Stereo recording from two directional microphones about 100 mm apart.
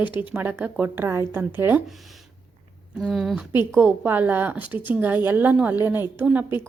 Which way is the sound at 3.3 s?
20° right (ahead or behind).